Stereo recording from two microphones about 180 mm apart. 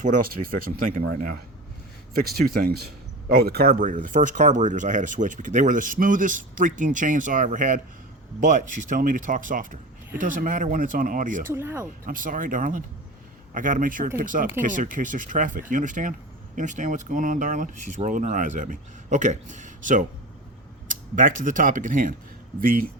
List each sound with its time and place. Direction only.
0.0 s speech: 50° right (ahead or behind)
11.5 s speech: 15° right (ahead or behind)
12.0 s speech: 50° right (ahead or behind)